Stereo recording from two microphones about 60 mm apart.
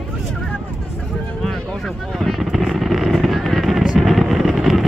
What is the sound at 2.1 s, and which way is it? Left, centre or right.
Vehicle, centre.